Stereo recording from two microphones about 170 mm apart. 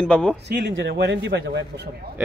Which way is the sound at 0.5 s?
90° right.